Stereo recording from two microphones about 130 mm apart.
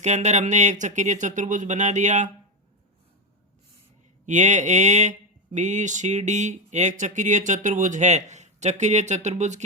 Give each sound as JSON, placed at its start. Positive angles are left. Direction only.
{"t": 0.0, "sound": "speech", "side_deg": -65}
{"t": 4.3, "sound": "speech", "side_deg": -65}